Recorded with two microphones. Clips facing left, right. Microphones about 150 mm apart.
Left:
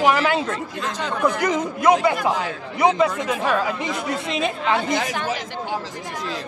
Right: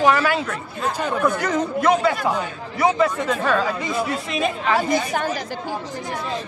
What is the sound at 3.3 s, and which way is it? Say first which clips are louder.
Speech: right 1 dB; 15° left (ahead or behind).